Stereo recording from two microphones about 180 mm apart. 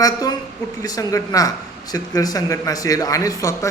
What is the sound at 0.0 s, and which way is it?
A man's voice, 20° left (ahead or behind).